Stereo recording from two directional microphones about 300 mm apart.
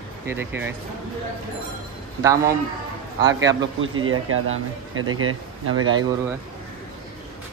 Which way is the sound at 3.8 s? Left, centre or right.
Right.